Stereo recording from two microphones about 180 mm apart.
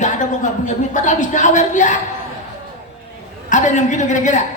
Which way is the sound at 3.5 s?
40° left (ahead or behind).